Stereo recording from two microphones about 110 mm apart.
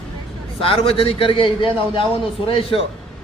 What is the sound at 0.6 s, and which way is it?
A man's voice, 55° left (ahead or behind).